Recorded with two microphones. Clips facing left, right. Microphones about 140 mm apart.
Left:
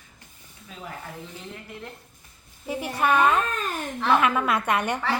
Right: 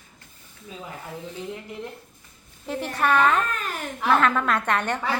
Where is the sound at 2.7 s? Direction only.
10° left (ahead or behind).